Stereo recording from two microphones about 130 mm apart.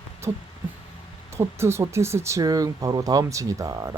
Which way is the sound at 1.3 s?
20° right (ahead or behind).